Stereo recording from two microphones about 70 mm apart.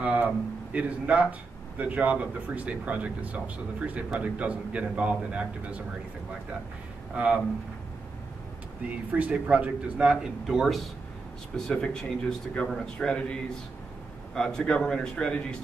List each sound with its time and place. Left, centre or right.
0.0 s a sound: right
0.7 s speech: right
7.2 s speech: centre
8.8 s speech: centre
11.5 s speech: centre